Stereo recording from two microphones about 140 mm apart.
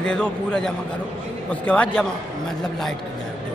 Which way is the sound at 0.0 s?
5° left (ahead or behind).